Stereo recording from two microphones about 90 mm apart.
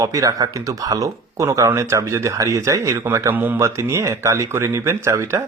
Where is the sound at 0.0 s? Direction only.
40° right (ahead or behind); by 3.6 s 20° right (ahead or behind).